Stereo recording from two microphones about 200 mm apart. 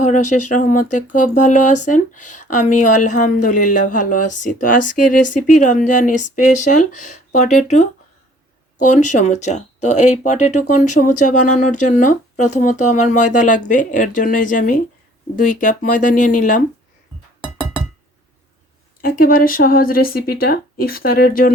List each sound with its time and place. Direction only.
0.0 s speech: 35° left (ahead or behind)
19.0 s speech: 45° left (ahead or behind)